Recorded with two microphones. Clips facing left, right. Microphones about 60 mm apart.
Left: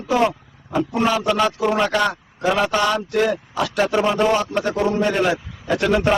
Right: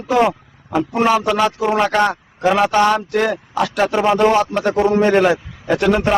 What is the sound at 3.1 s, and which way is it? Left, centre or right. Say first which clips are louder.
Speech: right 1 dB; right.